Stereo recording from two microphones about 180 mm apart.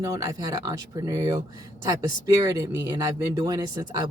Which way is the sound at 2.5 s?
15° right (ahead or behind).